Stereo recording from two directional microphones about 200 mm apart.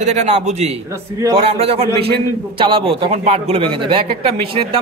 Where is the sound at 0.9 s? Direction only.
15° right (ahead or behind).